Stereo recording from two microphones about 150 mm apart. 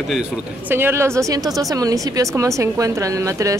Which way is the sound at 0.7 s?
15° right (ahead or behind).